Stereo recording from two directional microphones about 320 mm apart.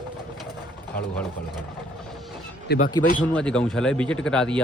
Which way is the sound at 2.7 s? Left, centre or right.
Left.